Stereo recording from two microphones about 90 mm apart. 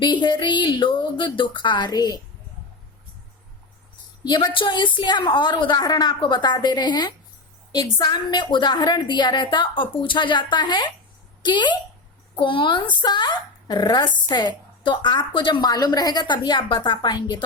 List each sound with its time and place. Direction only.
0.0 s speech: 60° left (ahead or behind)
4.2 s speech: 55° left (ahead or behind)
5.7 s speech: 50° left (ahead or behind)
6.1 s speech: 65° left (ahead or behind)
15.7 s speech: 50° left (ahead or behind)